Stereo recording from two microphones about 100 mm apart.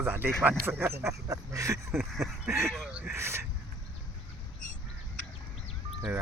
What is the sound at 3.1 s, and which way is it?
Speech, 25° right (ahead or behind).